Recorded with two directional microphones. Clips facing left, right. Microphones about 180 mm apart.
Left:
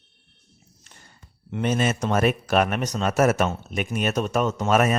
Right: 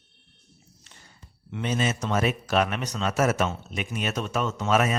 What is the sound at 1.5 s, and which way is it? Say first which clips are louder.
A man's voice: left 4 dB; 50° left (ahead or behind).